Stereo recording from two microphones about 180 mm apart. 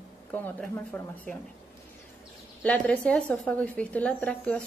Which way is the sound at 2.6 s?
5° left (ahead or behind).